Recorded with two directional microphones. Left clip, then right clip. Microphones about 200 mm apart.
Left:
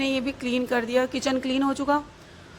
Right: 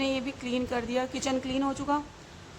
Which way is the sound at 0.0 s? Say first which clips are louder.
Left 4 dB; 15° left (ahead or behind).